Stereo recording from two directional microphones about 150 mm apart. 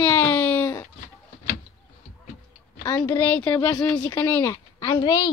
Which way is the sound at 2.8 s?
25° left (ahead or behind).